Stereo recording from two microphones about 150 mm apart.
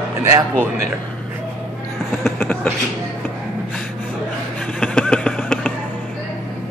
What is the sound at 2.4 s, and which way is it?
Beatboxing, 10° left (ahead or behind).